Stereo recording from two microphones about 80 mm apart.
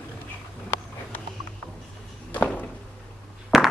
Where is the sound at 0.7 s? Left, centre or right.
Left.